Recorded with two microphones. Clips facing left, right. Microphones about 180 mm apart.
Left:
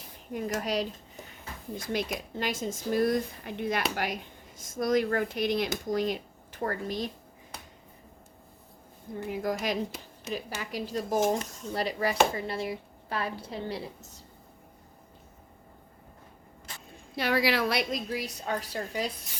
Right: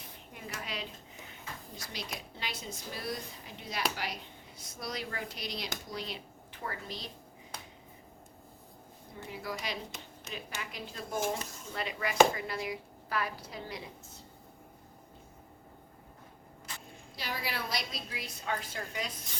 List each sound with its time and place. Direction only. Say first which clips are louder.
0.3 s speech: left 12 dB; 45° left (ahead or behind)
1.7 s speech: left 13 dB; 50° left (ahead or behind)
9.3 s speech: left 9 dB; 45° left (ahead or behind); by 13.8 s 30° left (ahead or behind)
17.2 s a woman's voice: left 12 dB; 70° left (ahead or behind); by 19.1 s 35° left (ahead or behind)